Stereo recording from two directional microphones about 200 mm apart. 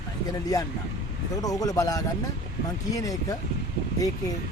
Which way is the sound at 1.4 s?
20° left (ahead or behind).